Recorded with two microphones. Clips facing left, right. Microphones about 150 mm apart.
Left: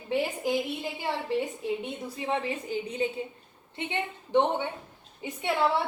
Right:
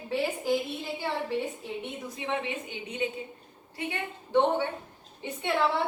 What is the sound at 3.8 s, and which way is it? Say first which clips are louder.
A woman's voice: left 2 dB; 25° left (ahead or behind).